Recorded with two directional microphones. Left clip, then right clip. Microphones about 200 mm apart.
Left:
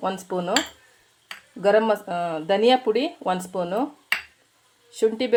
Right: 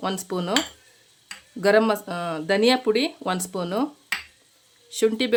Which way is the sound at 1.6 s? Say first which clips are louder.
Even; 35° right (ahead or behind).